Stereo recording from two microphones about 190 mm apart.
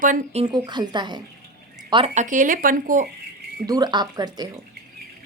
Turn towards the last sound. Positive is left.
turn(degrees=-20)  # may be behind; listen again after turning